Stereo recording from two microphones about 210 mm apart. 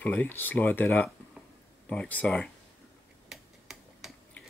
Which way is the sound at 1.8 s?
5° left (ahead or behind).